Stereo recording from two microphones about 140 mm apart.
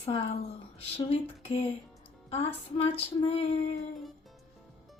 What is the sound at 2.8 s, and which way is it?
Speech, 45° left (ahead or behind).